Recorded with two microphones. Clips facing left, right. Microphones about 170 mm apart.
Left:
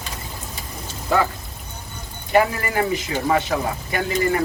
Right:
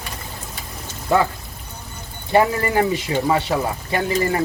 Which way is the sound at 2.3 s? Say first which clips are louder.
Right 2 dB; 30° right (ahead or behind).